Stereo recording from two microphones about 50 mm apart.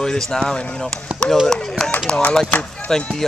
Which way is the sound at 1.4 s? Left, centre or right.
Centre.